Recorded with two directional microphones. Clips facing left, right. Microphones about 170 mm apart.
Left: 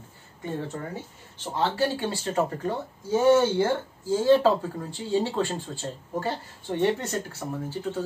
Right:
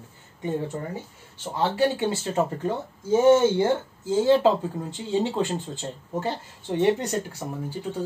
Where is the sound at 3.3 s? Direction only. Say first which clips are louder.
Right 2 dB; 20° right (ahead or behind).